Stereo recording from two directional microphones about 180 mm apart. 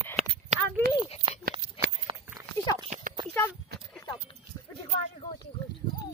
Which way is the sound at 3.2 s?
10° left (ahead or behind).